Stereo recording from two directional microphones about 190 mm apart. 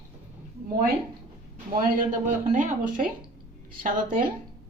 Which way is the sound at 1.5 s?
45° right (ahead or behind).